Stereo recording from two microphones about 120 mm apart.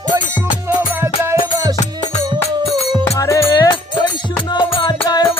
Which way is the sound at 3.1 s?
25° left (ahead or behind).